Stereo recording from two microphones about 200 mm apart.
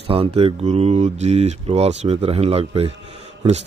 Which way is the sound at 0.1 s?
25° right (ahead or behind).